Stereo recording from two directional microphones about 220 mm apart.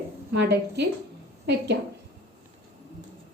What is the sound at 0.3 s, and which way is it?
A woman's voice, 50° right (ahead or behind).